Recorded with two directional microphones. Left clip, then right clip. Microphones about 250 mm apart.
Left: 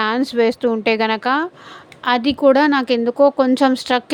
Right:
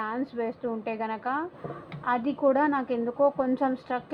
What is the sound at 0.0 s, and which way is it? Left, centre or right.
A woman's voice, left.